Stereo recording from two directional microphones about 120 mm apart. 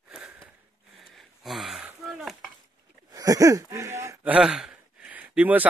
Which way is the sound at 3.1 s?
30° right (ahead or behind).